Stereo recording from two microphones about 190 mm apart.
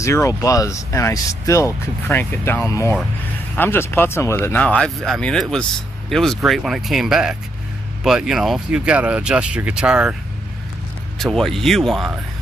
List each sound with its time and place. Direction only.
0.0 s speech: 15° left (ahead or behind); by 10.1 s 5° right (ahead or behind)
11.1 s speech: centre (ahead or behind)